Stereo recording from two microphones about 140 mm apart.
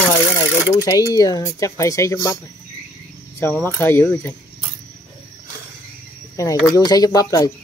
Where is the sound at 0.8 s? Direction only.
25° left (ahead or behind).